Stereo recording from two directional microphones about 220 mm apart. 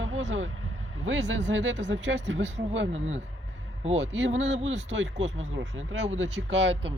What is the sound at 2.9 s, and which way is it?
Speech, 30° right (ahead or behind).